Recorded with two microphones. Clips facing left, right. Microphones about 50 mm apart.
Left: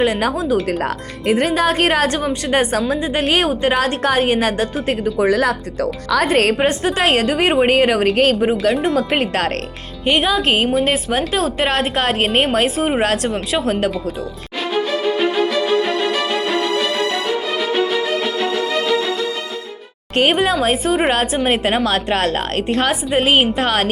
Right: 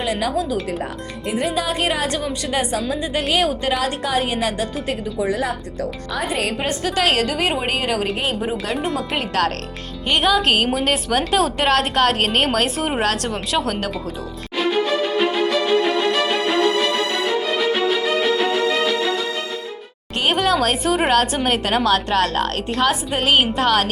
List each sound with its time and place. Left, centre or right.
0.0 s a woman's voice: left
1.3 s a woman's voice: left
5.3 s speech: left
6.1 s speech: left
6.6 s a woman's voice: left
8.1 s speech: left
8.4 s a woman's voice: left
8.7 s speech: centre
9.1 s a woman's voice: left
10.1 s a woman's voice: centre
17.7 s music: centre
20.3 s a woman's voice: centre
21.4 s a woman's voice: left
21.8 s a woman's voice: left